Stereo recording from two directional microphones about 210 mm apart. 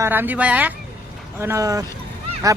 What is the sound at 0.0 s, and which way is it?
Speech, 10° right (ahead or behind).